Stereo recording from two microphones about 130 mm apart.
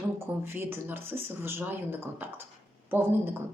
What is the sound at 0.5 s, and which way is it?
A woman's voice, 15° right (ahead or behind).